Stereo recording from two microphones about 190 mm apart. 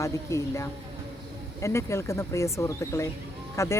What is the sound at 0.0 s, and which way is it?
Speech, 15° left (ahead or behind).